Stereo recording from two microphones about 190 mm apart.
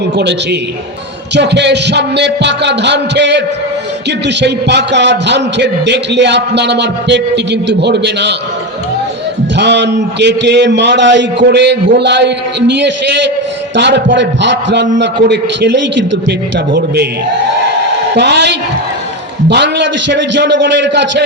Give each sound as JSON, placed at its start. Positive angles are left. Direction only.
{"t": 1.3, "sound": "a man's voice", "side_deg": -65}
{"t": 9.6, "sound": "a man's voice", "side_deg": -65}
{"t": 13.7, "sound": "a man's voice", "side_deg": -65}
{"t": 16.7, "sound": "a man's voice", "side_deg": -60}
{"t": 18.1, "sound": "a man's voice", "side_deg": -65}